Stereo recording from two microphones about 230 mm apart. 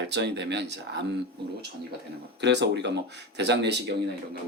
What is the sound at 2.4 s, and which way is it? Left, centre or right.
Speech, right.